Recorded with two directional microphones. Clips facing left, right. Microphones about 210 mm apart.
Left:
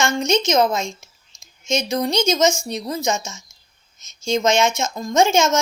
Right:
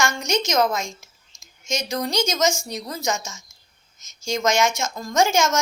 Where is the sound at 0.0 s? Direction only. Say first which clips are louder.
Left 4 dB; 20° left (ahead or behind).